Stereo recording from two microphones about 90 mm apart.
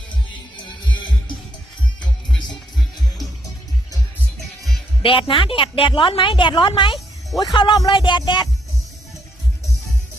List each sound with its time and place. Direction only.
5.0 s speech: 85° left; by 6.5 s 65° left (ahead or behind)
6.6 s music: 60° left (ahead or behind)
7.3 s a man's voice: 50° left (ahead or behind)
7.9 s music: 60° left (ahead or behind)